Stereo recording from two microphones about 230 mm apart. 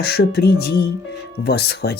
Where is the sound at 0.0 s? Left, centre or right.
Left.